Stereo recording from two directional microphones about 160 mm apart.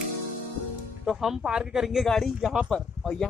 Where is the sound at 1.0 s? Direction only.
Centre (ahead or behind).